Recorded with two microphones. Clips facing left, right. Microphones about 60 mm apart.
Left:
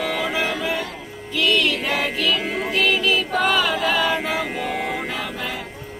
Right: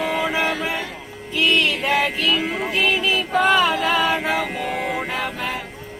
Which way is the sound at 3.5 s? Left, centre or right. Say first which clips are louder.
Right 2 dB; right.